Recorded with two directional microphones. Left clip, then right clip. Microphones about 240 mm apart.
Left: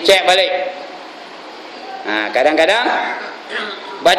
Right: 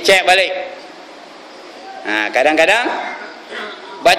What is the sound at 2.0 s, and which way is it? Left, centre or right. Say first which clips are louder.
Speech: right 1 dB; right.